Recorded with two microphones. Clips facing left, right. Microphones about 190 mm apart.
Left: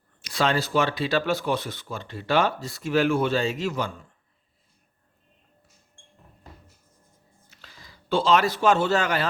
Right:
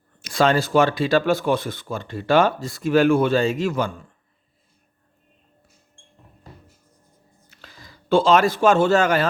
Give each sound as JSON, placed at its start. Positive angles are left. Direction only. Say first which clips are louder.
{"t": 0.2, "sound": "speech", "louder": "right 5 dB", "side_deg": -50}
{"t": 7.5, "sound": "a sound", "louder": "right 5 dB", "side_deg": -50}
{"t": 8.1, "sound": "speech", "louder": "right 5 dB", "side_deg": -50}